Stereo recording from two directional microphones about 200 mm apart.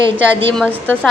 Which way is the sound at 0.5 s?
5° left (ahead or behind).